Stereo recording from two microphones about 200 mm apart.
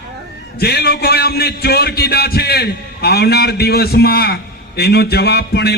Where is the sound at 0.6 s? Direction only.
55° left (ahead or behind).